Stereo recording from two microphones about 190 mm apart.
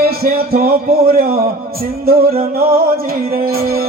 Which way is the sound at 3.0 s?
50° right (ahead or behind).